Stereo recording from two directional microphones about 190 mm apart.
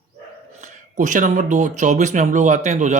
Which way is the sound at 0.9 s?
40° right (ahead or behind).